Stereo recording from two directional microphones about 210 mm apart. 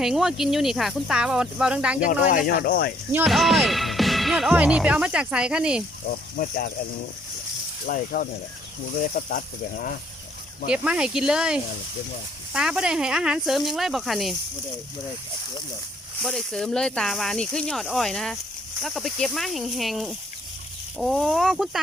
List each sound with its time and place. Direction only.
0.0 s speech: centre (ahead or behind)
2.0 s speech: 45° left (ahead or behind)
3.1 s speech: 5° right (ahead or behind)
6.1 s speech: 40° left (ahead or behind)
7.9 s speech: 45° left (ahead or behind)
10.7 s speech: 5° right (ahead or behind)
16.2 s speech: centre (ahead or behind)